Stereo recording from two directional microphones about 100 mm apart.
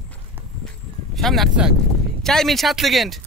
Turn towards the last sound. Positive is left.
turn(degrees=0)  # may be behind; listen again after turning